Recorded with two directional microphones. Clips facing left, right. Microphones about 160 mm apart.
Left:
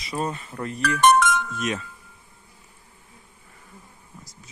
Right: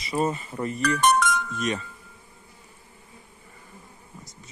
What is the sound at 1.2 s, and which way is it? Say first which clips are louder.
Music: left 3 dB; 90° left.